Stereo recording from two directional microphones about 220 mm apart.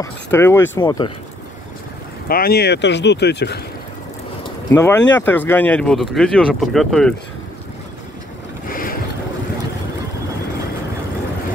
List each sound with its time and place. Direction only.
0.0 s speech: 10° left (ahead or behind)
2.2 s speech: 45° left (ahead or behind)
4.6 s speech: 10° left (ahead or behind)
8.6 s boat: 40° left (ahead or behind)